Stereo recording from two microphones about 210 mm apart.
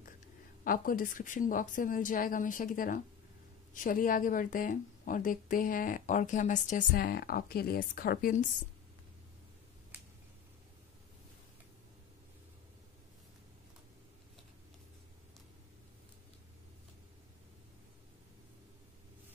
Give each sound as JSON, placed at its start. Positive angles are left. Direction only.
{"t": 0.7, "sound": "speech", "side_deg": 40}